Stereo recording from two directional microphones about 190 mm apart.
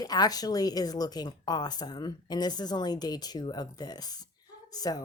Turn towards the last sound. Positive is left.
turn(degrees=20)  # may be behind; listen again after turning